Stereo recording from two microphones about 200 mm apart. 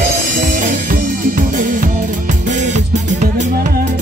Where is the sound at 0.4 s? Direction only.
40° right (ahead or behind).